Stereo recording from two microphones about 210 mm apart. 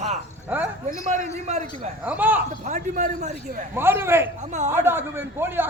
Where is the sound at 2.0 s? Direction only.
10° right (ahead or behind).